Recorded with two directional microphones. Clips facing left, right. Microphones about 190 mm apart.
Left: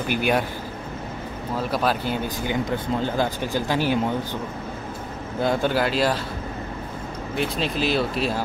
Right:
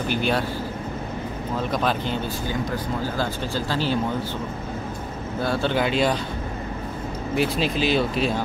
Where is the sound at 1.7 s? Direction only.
5° left (ahead or behind).